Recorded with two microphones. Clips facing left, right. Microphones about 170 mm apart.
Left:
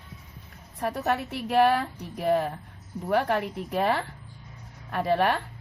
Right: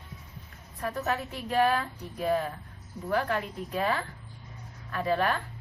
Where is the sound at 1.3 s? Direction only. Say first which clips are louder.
Left 4 dB; 70° left (ahead or behind).